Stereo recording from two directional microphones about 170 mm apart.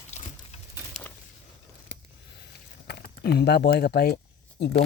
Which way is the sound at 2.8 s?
75° left (ahead or behind).